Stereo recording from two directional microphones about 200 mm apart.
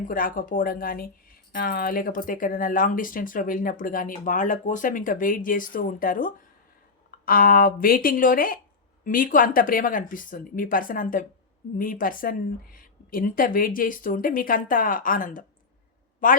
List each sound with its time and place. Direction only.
0.0 s speech: 45° left (ahead or behind)